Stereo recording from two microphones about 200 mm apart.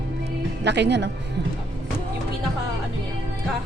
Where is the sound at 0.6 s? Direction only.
60° right (ahead or behind).